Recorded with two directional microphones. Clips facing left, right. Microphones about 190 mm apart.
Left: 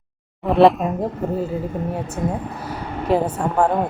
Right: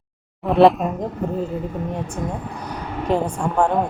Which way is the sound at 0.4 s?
Centre (ahead or behind).